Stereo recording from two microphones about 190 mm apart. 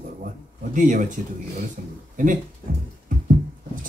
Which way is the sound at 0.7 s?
45° right (ahead or behind).